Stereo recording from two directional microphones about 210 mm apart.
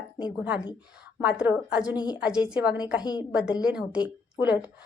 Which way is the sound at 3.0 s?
20° left (ahead or behind).